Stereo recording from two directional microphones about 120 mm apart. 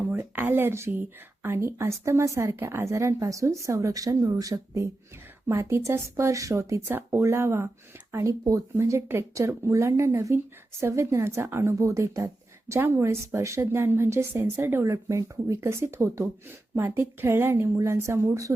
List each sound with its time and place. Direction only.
0.1 s speech: 15° right (ahead or behind)